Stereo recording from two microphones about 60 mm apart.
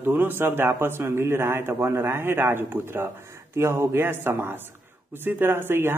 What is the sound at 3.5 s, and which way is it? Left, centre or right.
A man's voice, right.